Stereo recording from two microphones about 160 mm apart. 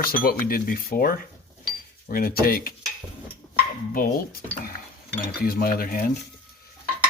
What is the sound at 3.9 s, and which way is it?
Speech, 65° left (ahead or behind).